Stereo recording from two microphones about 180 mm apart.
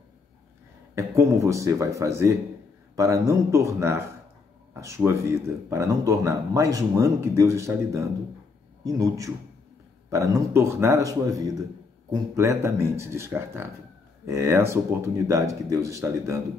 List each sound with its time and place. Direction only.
0.9 s a man's voice: 15° right (ahead or behind)